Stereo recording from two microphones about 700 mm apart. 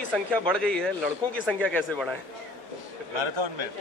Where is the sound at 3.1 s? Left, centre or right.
Right.